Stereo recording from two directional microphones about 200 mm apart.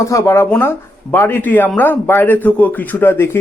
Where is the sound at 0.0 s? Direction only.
15° left (ahead or behind).